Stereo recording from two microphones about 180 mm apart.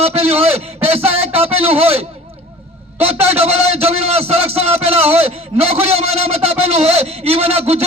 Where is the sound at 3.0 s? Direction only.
35° right (ahead or behind).